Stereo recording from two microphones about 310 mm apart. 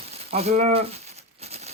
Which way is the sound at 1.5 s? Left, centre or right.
Centre.